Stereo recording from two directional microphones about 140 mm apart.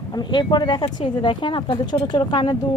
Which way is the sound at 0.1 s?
30° left (ahead or behind).